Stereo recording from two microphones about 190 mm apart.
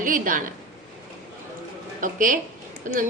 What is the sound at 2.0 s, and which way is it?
Speech, 45° right (ahead or behind).